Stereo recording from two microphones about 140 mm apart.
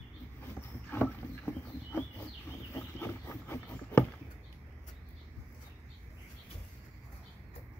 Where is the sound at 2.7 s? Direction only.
15° left (ahead or behind).